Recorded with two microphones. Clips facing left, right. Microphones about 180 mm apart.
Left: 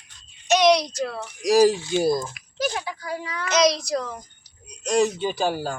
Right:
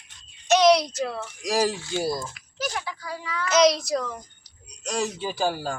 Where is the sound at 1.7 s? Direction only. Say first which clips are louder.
Left 6 dB; 20° left (ahead or behind).